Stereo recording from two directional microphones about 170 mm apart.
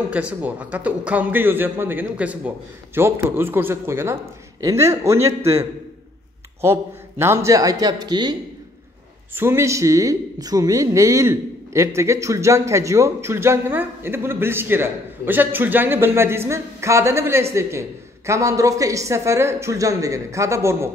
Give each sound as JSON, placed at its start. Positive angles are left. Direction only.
{"t": 0.1, "sound": "a woman's voice", "side_deg": -10}
{"t": 9.3, "sound": "a woman's voice", "side_deg": -15}